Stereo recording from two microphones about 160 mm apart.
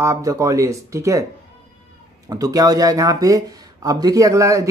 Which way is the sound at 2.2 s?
20° right (ahead or behind).